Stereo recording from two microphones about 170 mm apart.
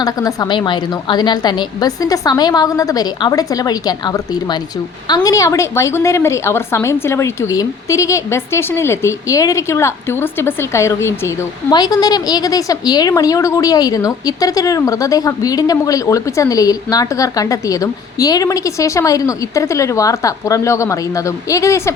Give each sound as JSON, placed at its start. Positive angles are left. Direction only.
{"t": 0.0, "sound": "a woman's voice", "side_deg": 20}